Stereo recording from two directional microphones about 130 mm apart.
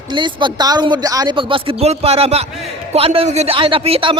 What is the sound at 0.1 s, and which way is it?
Speech, 35° right (ahead or behind).